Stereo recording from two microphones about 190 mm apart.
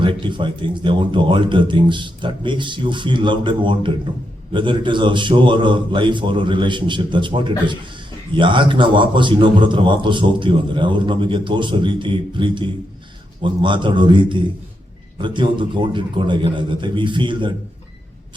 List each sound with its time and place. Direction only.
0.0 s a man's voice: 25° right (ahead or behind)